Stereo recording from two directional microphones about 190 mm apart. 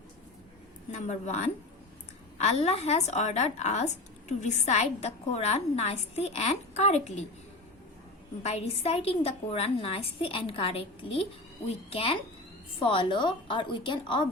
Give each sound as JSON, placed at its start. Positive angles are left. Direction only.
{"t": 0.9, "sound": "a woman's voice", "side_deg": 40}
{"t": 8.4, "sound": "a woman's voice", "side_deg": 35}